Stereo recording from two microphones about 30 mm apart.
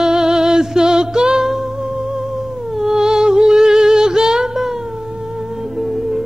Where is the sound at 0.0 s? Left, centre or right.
Centre.